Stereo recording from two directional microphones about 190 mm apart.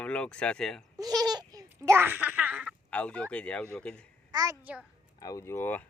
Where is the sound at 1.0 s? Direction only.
20° right (ahead or behind).